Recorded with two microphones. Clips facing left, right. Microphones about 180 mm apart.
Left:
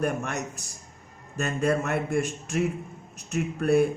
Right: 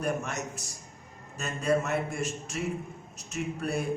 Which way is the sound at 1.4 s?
55° left (ahead or behind).